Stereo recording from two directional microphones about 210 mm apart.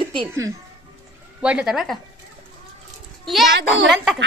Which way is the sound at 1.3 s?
5° right (ahead or behind).